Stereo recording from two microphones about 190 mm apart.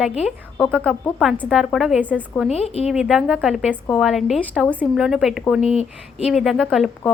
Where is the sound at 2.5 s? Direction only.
30° left (ahead or behind).